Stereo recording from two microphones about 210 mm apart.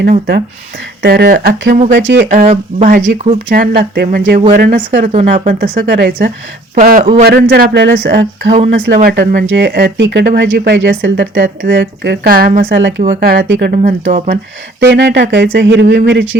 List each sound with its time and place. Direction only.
0.0 s speech: 45° right (ahead or behind)
1.9 s speech: 60° right (ahead or behind)
2.3 s speech: 35° right (ahead or behind)
3.5 s speech: 45° right (ahead or behind)
5.1 s speech: 35° right (ahead or behind)
5.8 s speech: 45° right (ahead or behind)
12.6 s speech: 60° right (ahead or behind)
13.1 s speech: 45° right (ahead or behind)
13.8 s speech: 40° right (ahead or behind)
14.8 s speech: 50° right (ahead or behind)